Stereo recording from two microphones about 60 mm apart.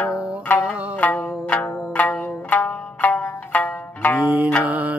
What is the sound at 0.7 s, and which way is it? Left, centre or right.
Zither, left.